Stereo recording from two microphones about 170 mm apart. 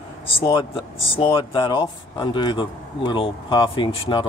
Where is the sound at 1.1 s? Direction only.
30° left (ahead or behind).